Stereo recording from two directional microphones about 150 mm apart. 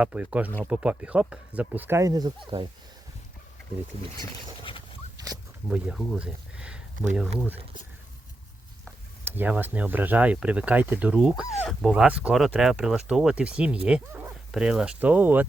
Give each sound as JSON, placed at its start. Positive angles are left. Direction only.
{"t": 0.0, "sound": "speech", "side_deg": -10}
{"t": 2.5, "sound": "speech", "side_deg": -35}
{"t": 5.1, "sound": "zipper", "side_deg": -25}
{"t": 5.6, "sound": "speech", "side_deg": -5}
{"t": 9.2, "sound": "speech", "side_deg": -15}